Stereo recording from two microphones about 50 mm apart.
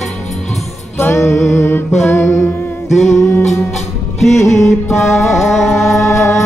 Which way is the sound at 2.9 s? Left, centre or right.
Centre.